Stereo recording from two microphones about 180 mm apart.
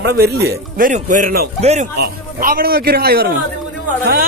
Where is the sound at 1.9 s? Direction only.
55° right (ahead or behind).